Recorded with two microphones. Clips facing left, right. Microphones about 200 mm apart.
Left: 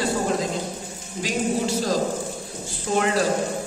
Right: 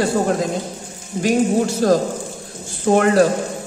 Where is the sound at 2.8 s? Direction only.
55° right (ahead or behind).